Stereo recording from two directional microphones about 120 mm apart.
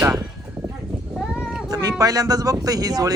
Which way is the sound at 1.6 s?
30° right (ahead or behind).